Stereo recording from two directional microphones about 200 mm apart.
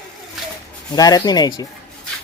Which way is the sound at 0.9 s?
20° left (ahead or behind).